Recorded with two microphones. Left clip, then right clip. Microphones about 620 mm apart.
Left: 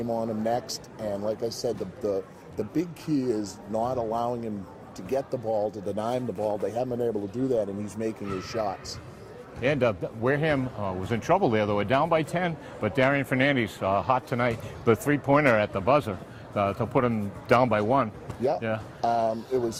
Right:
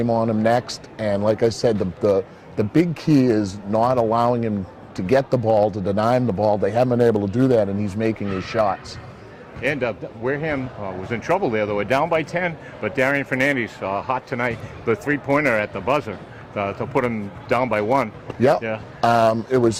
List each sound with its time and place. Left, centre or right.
0.1 s a man's voice: right
9.6 s a man's voice: left
19.0 s speech: right